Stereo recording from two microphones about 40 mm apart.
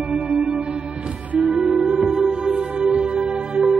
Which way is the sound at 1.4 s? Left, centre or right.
Centre.